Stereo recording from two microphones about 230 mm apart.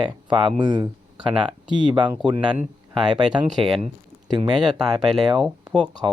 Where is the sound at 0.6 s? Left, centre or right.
Centre.